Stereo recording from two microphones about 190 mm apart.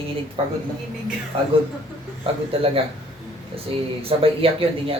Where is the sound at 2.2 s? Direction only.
30° right (ahead or behind).